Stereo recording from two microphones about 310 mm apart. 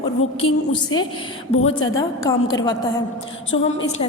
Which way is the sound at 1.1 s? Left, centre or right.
Centre.